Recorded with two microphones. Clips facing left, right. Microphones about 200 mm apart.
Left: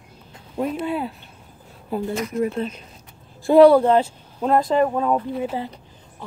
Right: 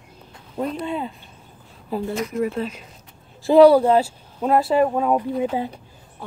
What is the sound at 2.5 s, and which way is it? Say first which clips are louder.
Speech: even; 5° right (ahead or behind).